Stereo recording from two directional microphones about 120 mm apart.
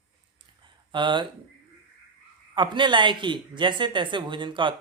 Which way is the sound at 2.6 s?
40° right (ahead or behind).